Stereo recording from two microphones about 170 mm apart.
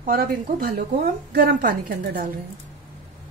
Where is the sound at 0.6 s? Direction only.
60° right (ahead or behind).